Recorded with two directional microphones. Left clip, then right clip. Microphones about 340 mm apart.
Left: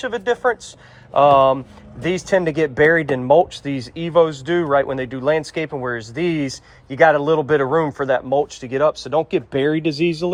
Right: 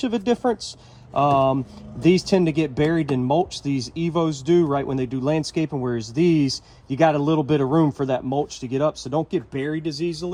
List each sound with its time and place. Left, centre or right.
0.0 s speech: centre
10.2 s speech: left